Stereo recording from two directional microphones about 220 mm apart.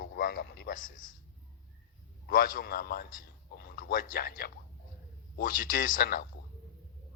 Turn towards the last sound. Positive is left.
turn(degrees=40)  # may be behind; listen again after turning